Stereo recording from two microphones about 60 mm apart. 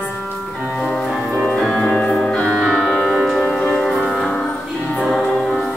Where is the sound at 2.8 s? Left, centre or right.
Centre.